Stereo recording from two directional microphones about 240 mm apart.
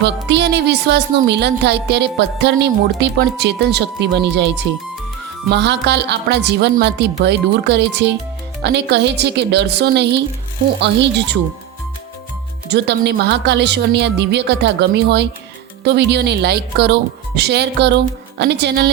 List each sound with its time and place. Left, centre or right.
0.0 s speech: right
12.7 s speech: right